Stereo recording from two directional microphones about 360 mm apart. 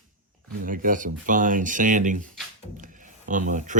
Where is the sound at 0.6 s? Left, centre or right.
Right.